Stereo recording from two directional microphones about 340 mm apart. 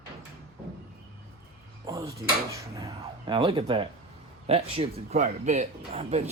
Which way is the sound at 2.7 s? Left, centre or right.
Centre.